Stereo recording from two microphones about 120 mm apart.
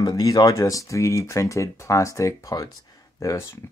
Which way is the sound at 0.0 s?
30° left (ahead or behind).